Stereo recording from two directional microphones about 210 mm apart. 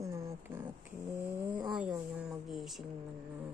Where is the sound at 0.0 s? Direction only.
15° right (ahead or behind).